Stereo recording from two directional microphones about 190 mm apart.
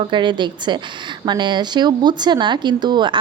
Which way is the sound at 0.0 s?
25° right (ahead or behind).